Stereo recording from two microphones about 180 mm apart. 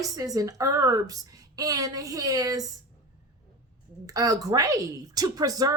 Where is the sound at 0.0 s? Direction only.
20° right (ahead or behind).